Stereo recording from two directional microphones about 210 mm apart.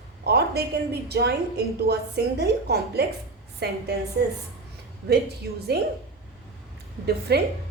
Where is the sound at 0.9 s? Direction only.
50° right (ahead or behind).